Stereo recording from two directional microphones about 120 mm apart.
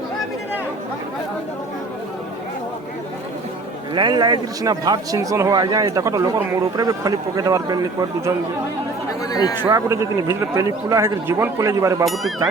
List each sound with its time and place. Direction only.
3.9 s a man's voice: 40° right (ahead or behind)
9.3 s a man's voice: 35° left (ahead or behind)
9.6 s a man's voice: 25° right (ahead or behind)
12.0 s speech: centre (ahead or behind)